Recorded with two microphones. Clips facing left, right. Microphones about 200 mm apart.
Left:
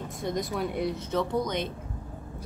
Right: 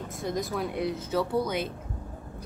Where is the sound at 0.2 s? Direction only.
Centre (ahead or behind).